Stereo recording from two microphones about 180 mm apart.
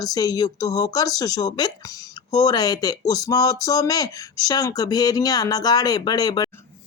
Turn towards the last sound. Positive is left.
turn(degrees=20)  # may be behind; listen again after turning